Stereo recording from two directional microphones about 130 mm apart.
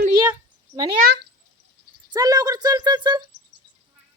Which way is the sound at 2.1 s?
30° right (ahead or behind).